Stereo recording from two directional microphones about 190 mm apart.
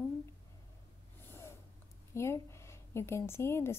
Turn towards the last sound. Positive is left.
turn(degrees=15)  # may be behind; listen again after turning